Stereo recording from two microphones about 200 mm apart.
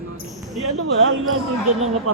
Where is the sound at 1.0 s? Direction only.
85° right.